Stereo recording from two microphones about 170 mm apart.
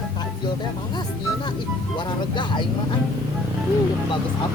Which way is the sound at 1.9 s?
25° left (ahead or behind).